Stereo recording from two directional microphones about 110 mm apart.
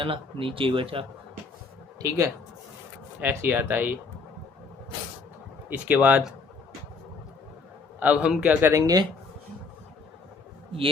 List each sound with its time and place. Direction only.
0.0 s speech: 55° right (ahead or behind)
2.0 s speech: 30° right (ahead or behind)
3.2 s speech: 15° right (ahead or behind)
5.6 s speech: 15° right (ahead or behind)
7.9 s speech: 10° right (ahead or behind)
8.7 s speech: 35° right (ahead or behind)